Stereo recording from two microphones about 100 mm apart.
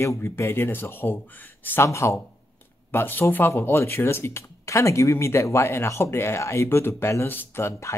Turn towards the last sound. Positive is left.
turn(degrees=25)  # may be behind; listen again after turning